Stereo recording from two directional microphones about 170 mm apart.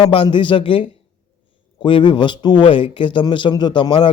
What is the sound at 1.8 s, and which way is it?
A man's voice, 30° left (ahead or behind).